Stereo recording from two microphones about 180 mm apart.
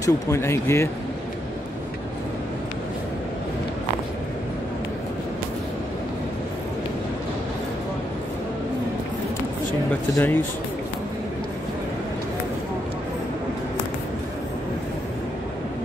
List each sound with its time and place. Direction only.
0.0 s speech: 15° left (ahead or behind)
10.1 s speech: 10° left (ahead or behind)